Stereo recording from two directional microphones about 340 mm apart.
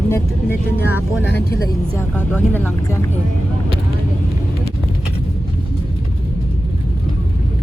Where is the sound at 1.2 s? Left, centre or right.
Left.